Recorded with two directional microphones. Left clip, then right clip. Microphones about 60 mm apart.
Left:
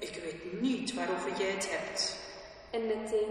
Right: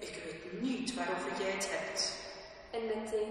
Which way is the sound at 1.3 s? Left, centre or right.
Left.